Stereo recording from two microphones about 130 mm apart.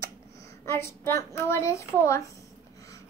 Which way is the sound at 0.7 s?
20° left (ahead or behind).